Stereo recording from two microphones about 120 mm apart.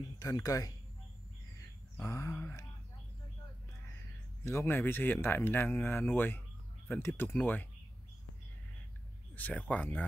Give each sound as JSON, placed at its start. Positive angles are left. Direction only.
{"t": 0.2, "sound": "speech", "side_deg": 30}
{"t": 2.0, "sound": "a sound", "side_deg": 25}
{"t": 4.5, "sound": "speech", "side_deg": 20}
{"t": 9.3, "sound": "speech", "side_deg": 10}